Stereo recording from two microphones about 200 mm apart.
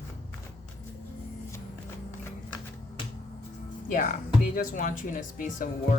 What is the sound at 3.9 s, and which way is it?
Speech, 40° left (ahead or behind).